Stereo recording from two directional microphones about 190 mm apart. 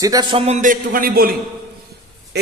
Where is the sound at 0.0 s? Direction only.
20° right (ahead or behind); by 1.4 s 50° right (ahead or behind).